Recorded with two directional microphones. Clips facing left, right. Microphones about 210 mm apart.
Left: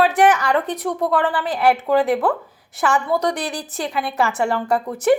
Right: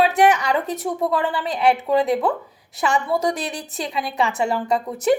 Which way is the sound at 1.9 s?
25° right (ahead or behind).